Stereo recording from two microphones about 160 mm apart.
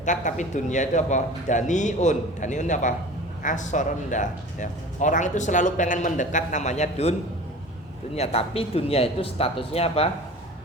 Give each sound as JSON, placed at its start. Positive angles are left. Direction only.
{"t": 0.0, "sound": "speech", "side_deg": 50}
{"t": 8.1, "sound": "speech", "side_deg": 40}